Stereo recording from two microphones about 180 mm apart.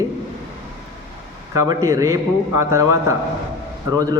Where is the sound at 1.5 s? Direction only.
20° right (ahead or behind).